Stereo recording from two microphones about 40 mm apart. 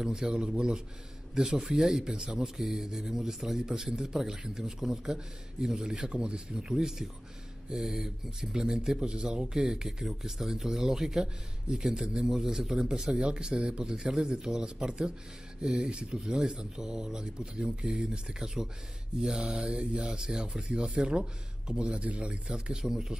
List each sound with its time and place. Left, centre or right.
0.0 s speech: centre
3.6 s speech: centre
15.6 s speech: centre
15.9 s speech: right
22.7 s speech: centre